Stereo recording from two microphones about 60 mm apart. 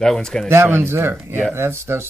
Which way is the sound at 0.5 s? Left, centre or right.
Right.